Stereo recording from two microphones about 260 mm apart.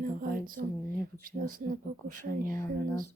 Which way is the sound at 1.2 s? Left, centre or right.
Right.